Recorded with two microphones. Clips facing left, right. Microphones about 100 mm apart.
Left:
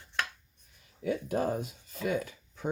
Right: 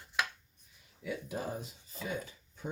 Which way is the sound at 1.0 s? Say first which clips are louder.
Left 8 dB; 60° left (ahead or behind).